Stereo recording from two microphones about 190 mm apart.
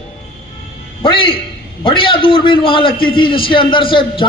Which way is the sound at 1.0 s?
25° left (ahead or behind).